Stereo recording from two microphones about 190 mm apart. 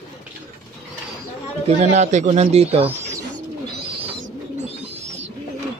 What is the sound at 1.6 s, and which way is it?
Speech, 35° right (ahead or behind).